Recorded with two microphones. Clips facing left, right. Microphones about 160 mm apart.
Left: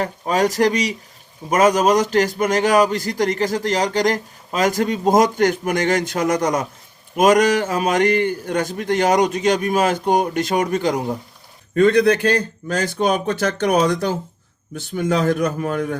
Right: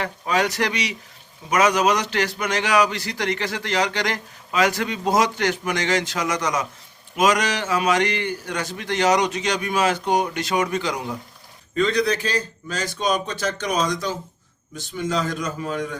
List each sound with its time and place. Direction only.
0.0 s a man's voice: 45° left (ahead or behind)